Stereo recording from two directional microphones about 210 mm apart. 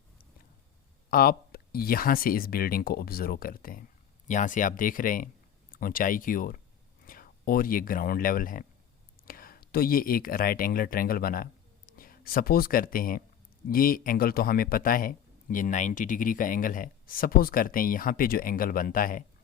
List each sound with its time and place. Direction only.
1.1 s a man's voice: 45° left (ahead or behind)